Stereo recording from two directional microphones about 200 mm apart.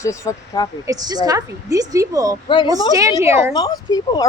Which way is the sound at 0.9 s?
20° right (ahead or behind).